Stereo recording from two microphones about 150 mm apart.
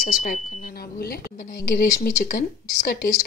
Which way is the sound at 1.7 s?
75° left (ahead or behind).